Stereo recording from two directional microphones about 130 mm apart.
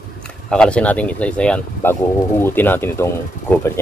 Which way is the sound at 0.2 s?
5° left (ahead or behind).